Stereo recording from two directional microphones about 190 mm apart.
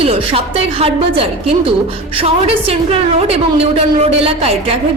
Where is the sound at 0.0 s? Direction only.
30° right (ahead or behind).